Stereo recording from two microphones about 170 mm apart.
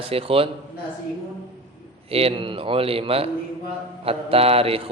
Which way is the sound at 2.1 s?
35° right (ahead or behind).